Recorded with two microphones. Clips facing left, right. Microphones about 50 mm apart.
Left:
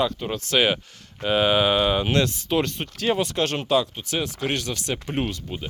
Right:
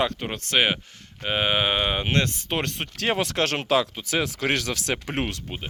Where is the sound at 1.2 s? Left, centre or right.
Right.